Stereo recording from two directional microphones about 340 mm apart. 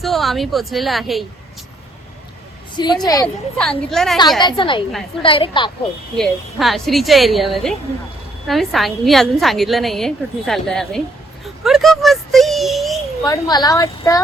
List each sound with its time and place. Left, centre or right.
0.0 s a woman's voice: centre
2.7 s a woman's voice: centre
4.4 s a woman's voice: centre
6.1 s a woman's voice: centre
11.4 s a sound: centre
13.2 s a woman's voice: centre